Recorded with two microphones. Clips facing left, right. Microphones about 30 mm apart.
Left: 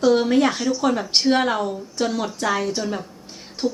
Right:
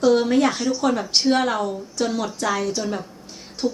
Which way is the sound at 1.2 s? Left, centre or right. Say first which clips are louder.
Left 1 dB; centre.